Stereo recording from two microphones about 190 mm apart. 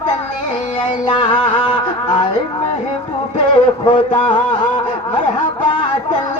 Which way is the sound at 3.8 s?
25° left (ahead or behind).